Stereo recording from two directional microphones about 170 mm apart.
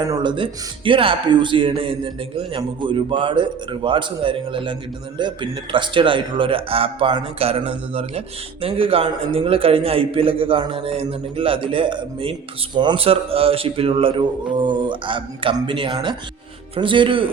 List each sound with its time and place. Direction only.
0.1 s a man's voice: 25° right (ahead or behind)